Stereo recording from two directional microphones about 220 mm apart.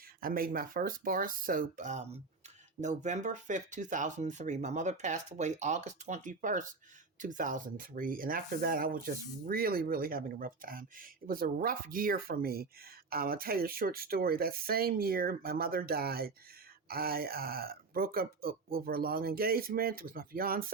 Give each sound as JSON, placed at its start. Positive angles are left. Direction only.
{"t": 0.2, "sound": "speech", "side_deg": -40}